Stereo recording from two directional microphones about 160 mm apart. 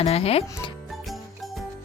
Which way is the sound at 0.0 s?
40° left (ahead or behind).